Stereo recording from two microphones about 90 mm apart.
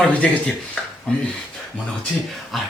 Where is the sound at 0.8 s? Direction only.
10° left (ahead or behind).